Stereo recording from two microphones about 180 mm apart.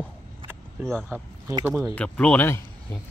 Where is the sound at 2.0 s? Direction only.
5° left (ahead or behind).